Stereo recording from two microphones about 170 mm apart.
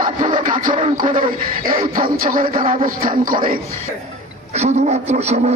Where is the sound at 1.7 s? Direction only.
55° right (ahead or behind).